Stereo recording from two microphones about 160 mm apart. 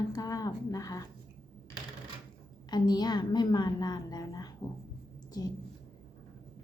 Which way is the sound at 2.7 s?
25° left (ahead or behind).